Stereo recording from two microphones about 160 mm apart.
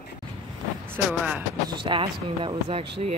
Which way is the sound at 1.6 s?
30° right (ahead or behind).